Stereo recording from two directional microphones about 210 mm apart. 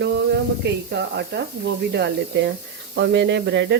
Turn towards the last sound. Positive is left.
turn(degrees=-55)  # may be behind; listen again after turning